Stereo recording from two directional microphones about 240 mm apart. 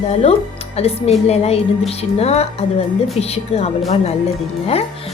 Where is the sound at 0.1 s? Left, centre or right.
Left.